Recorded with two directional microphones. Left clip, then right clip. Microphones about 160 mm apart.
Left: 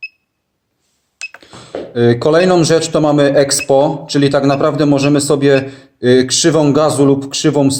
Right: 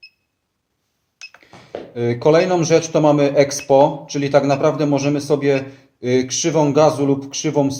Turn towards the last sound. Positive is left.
turn(degrees=25)  # may be behind; listen again after turning